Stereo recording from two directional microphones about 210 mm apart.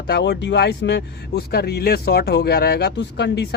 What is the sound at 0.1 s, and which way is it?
Speech, 55° left (ahead or behind).